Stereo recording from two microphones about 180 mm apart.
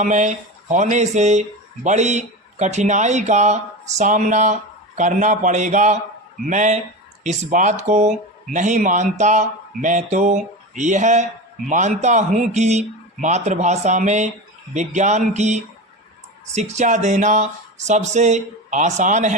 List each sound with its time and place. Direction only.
0.0 s a man's voice: 40° right (ahead or behind)